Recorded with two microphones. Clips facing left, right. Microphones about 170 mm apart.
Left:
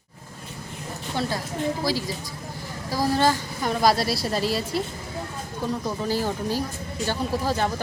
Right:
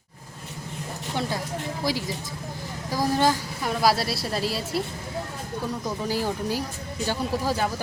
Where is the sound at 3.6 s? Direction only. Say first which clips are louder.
Left 2 dB; 5° right (ahead or behind).